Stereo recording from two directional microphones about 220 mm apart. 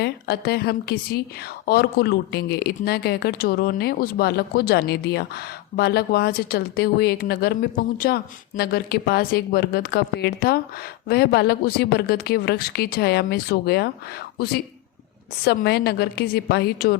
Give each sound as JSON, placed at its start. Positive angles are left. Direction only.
{"t": 0.0, "sound": "speech", "side_deg": 45}